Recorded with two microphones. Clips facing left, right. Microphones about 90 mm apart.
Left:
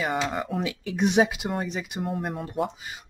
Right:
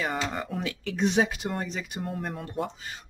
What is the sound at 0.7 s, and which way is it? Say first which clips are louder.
Speech: right 1 dB; 15° left (ahead or behind).